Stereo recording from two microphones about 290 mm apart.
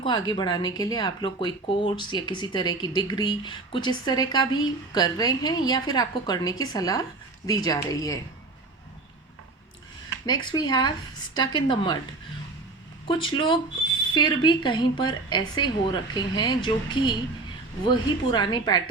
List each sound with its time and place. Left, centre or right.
0.0 s speech: centre
10.2 s speech: centre
13.1 s speech: centre